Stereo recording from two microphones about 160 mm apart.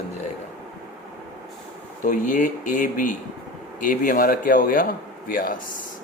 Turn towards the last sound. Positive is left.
turn(degrees=60)  # may be behind; listen again after turning